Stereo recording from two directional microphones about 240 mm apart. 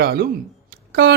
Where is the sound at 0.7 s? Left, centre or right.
Right.